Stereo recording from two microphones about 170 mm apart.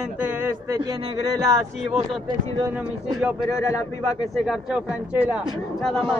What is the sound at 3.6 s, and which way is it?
Speech, 20° left (ahead or behind).